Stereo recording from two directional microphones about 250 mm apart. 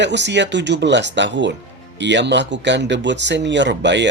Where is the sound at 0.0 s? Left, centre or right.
Right.